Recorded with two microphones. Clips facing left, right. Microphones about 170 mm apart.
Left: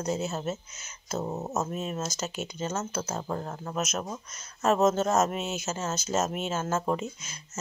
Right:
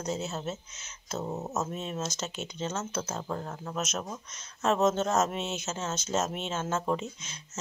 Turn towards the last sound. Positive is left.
turn(degrees=5)  # may be behind; listen again after turning